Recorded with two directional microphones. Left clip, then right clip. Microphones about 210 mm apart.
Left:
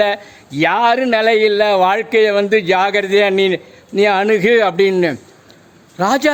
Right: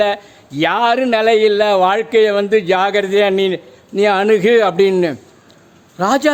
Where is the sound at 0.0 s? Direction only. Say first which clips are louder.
Even; 10° left (ahead or behind).